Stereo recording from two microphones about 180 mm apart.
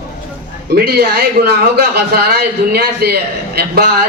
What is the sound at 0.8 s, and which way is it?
A man's voice, 60° right (ahead or behind).